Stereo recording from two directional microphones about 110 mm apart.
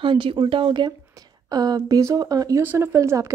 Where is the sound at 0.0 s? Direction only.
50° right (ahead or behind); by 2.6 s 35° right (ahead or behind).